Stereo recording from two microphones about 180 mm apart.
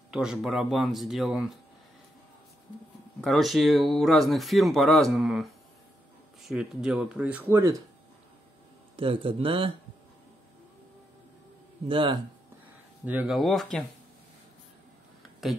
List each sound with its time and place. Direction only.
0.1 s speech: 5° right (ahead or behind)
3.2 s speech: centre (ahead or behind)
8.9 s speech: 30° right (ahead or behind)
11.9 s speech: 30° right (ahead or behind)
13.0 s speech: 10° right (ahead or behind)
13.4 s speech: centre (ahead or behind)